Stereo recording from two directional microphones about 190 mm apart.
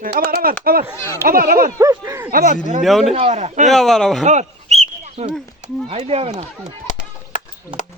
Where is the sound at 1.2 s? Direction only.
50° right (ahead or behind).